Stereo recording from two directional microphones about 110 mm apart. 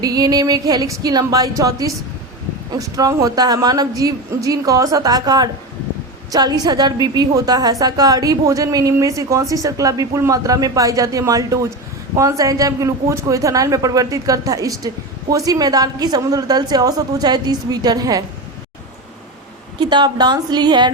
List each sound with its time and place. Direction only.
0.0 s a woman's voice: 35° right (ahead or behind)
19.8 s a woman's voice: 45° right (ahead or behind)